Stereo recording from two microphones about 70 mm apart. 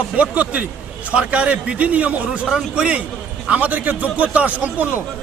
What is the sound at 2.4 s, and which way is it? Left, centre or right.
A man's voice, centre.